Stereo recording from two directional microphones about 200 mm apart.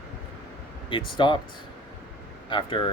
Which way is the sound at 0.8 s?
25° left (ahead or behind).